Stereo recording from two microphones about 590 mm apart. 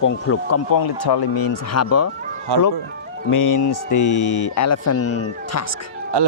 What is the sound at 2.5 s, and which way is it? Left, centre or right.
Speech, right.